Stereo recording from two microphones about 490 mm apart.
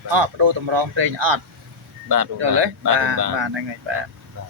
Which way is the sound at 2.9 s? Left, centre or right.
Right.